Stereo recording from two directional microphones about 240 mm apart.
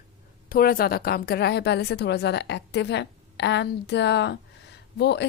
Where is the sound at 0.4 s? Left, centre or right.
Left.